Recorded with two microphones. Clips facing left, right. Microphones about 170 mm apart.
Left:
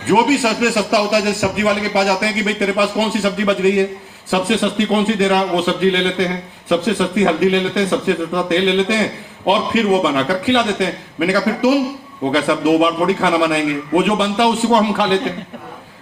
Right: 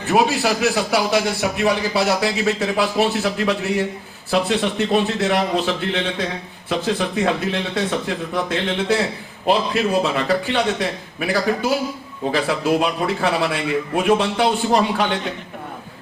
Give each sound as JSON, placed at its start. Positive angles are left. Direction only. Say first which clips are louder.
{"t": 0.6, "sound": "a man's voice", "louder": "left 3 dB", "side_deg": 90}